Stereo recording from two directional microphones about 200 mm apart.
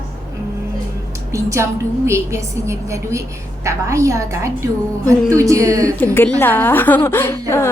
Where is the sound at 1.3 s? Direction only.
15° right (ahead or behind).